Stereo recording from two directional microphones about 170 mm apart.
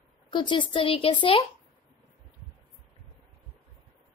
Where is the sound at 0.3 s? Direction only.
30° left (ahead or behind).